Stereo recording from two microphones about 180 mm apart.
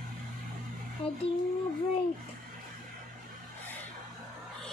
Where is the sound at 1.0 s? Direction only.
30° left (ahead or behind).